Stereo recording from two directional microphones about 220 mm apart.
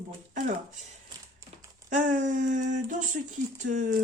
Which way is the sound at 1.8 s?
35° right (ahead or behind).